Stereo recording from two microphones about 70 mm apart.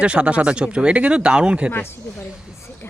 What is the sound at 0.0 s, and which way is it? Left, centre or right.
Speech, centre.